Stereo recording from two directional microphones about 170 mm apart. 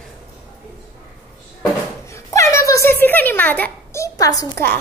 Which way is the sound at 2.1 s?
15° left (ahead or behind).